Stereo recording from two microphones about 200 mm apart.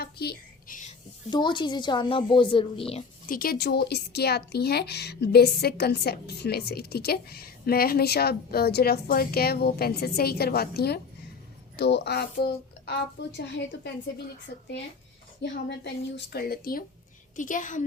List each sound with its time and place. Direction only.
0.0 s a sound: 50° left (ahead or behind)
1.3 s a woman's voice: 20° left (ahead or behind)
3.2 s a woman's voice: 45° left (ahead or behind)
15.4 s a woman's voice: 60° left (ahead or behind); by 17.8 s 40° left (ahead or behind)